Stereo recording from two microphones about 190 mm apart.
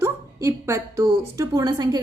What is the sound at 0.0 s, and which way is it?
A woman's voice, 15° right (ahead or behind).